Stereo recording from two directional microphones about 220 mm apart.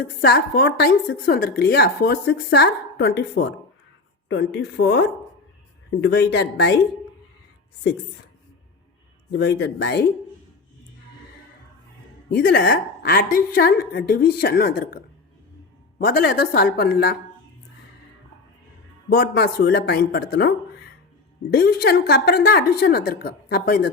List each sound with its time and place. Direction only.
0.0 s a woman's voice: 45° left (ahead or behind)
9.4 s a woman's voice: 50° left (ahead or behind)
12.3 s a woman's voice: 45° left (ahead or behind)
16.0 s a woman's voice: 40° left (ahead or behind)
19.1 s a woman's voice: 45° left (ahead or behind)
21.5 s a woman's voice: 45° left (ahead or behind)